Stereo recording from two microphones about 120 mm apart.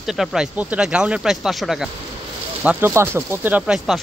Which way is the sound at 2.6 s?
20° right (ahead or behind).